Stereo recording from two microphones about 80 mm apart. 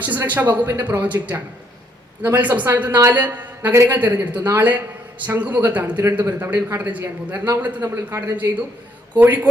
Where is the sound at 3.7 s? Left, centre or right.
Right.